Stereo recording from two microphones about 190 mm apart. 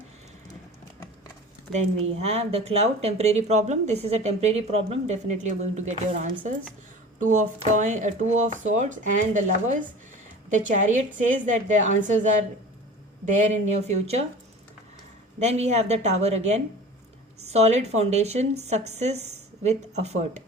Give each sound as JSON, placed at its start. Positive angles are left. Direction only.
{"t": 2.0, "sound": "speech", "side_deg": -35}
{"t": 13.5, "sound": "speech", "side_deg": -35}
{"t": 15.4, "sound": "speech", "side_deg": -35}